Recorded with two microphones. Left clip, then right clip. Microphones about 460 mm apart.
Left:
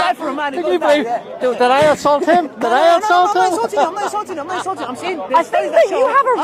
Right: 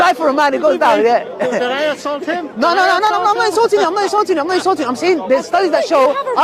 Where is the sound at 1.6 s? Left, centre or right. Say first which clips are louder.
Left 5 dB; left.